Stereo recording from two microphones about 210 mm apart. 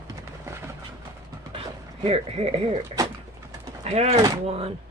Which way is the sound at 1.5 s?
25° right (ahead or behind).